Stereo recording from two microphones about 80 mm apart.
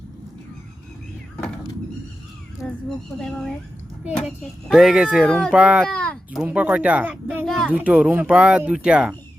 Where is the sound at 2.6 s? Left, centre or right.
Centre.